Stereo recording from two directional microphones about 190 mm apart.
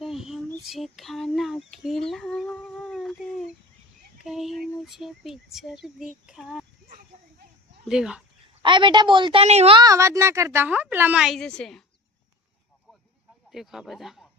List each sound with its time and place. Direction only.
0.0 s female singing: centre (ahead or behind)
0.6 s a sound: centre (ahead or behind)
6.2 s speech: 5° right (ahead or behind)
7.9 s speech: 5° right (ahead or behind)
8.6 s a woman's voice: 25° right (ahead or behind); by 11.8 s 5° left (ahead or behind)
13.5 s speech: centre (ahead or behind)